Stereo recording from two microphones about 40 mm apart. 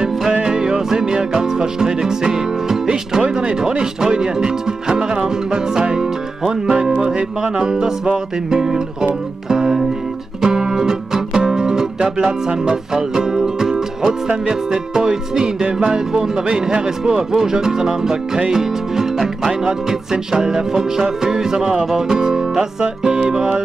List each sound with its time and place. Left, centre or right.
0.3 s music: right
0.6 s music: centre